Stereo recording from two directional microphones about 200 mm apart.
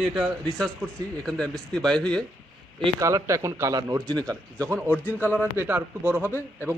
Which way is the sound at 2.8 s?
15° right (ahead or behind).